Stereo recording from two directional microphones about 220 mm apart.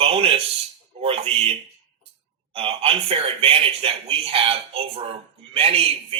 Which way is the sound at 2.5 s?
25° right (ahead or behind).